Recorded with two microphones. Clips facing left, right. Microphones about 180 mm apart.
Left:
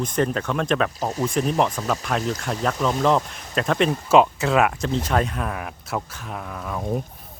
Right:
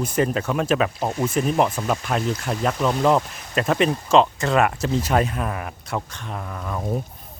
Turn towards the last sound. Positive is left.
turn(degrees=0)  # may be behind; listen again after turning